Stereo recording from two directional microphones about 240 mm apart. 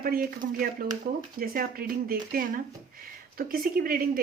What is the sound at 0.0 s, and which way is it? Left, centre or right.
A woman's voice, right.